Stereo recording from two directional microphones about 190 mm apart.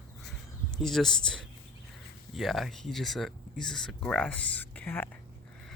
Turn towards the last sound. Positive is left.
turn(degrees=10)  # may be behind; listen again after turning